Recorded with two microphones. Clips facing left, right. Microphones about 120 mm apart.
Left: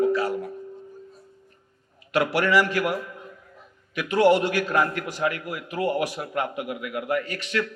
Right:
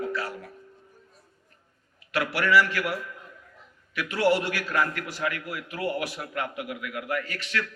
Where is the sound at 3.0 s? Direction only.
30° left (ahead or behind).